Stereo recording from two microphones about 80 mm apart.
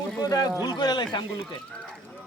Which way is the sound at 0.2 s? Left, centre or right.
Left.